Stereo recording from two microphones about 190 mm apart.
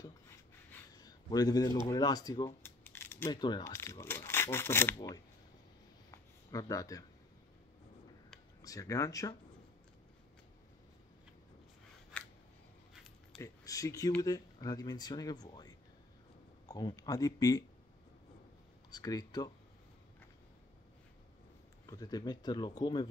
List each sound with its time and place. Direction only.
0.9 s speech: 20° left (ahead or behind)
2.8 s scissors: 10° left (ahead or behind)
3.3 s speech: 25° left (ahead or behind)
6.1 s a sound: 20° left (ahead or behind)
8.6 s speech: 15° left (ahead or behind)
12.1 s scissors: 5° left (ahead or behind)
12.9 s dog: centre (ahead or behind)
13.4 s speech: 15° left (ahead or behind)
18.9 s speech: 20° left (ahead or behind)
21.8 s speech: 20° left (ahead or behind)